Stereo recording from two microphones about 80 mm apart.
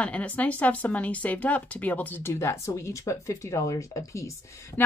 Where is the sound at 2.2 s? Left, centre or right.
Left.